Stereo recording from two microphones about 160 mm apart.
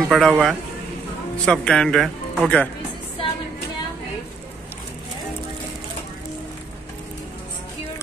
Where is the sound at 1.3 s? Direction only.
5° left (ahead or behind).